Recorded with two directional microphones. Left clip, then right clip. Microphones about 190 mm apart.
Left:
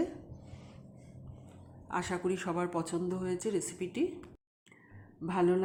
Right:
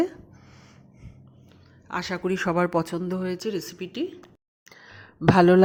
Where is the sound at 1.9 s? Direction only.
20° right (ahead or behind).